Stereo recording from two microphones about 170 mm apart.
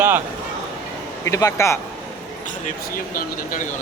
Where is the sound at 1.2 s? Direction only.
15° left (ahead or behind).